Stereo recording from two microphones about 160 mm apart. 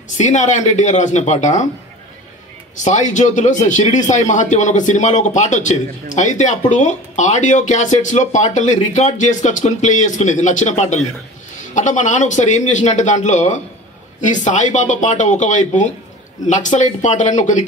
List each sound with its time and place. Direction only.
0.2 s a man's voice: 45° left (ahead or behind)
2.7 s a man's voice: 50° left (ahead or behind)